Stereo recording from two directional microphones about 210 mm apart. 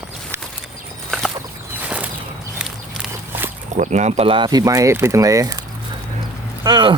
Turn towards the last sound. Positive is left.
turn(degrees=-20)  # may be behind; listen again after turning